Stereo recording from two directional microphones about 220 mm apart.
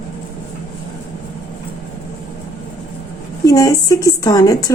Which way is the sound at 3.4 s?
15° left (ahead or behind).